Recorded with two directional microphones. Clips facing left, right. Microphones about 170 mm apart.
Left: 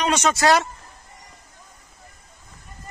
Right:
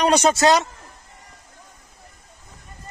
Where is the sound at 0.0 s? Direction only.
35° right (ahead or behind).